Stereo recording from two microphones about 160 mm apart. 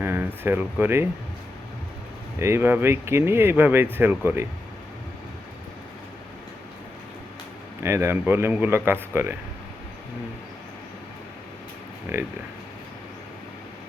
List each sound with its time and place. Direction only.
0.0 s speech: 15° right (ahead or behind)
2.4 s speech: 15° right (ahead or behind)
7.8 s speech: 15° right (ahead or behind)
12.1 s speech: 15° right (ahead or behind)